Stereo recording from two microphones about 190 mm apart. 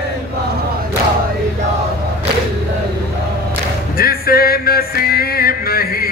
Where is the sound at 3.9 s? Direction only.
50° left (ahead or behind).